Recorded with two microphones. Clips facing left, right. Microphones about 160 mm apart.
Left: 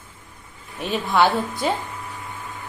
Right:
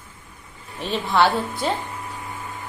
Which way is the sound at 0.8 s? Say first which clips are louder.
Even; 5° left (ahead or behind).